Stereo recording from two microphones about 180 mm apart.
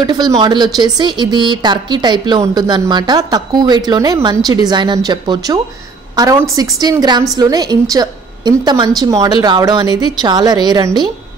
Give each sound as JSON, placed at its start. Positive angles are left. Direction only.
{"t": 0.0, "sound": "a woman's voice", "side_deg": -25}